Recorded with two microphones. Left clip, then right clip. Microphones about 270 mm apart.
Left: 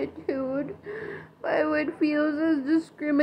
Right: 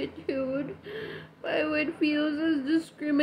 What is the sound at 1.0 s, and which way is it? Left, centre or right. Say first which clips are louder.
A woman's voice: left 4 dB; centre.